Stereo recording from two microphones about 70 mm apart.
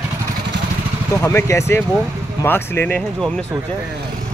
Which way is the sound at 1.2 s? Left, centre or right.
Left.